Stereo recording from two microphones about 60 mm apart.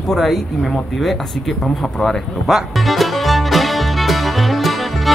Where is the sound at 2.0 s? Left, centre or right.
Centre.